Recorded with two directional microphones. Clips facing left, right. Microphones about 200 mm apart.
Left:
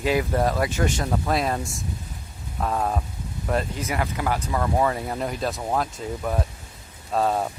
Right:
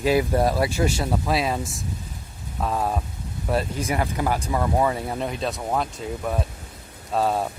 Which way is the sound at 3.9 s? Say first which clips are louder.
Right 2 dB; 30° right (ahead or behind).